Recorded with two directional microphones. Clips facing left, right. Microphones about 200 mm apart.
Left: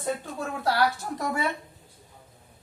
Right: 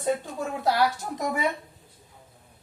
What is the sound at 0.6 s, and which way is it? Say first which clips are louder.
Speech: right 1 dB; 20° right (ahead or behind).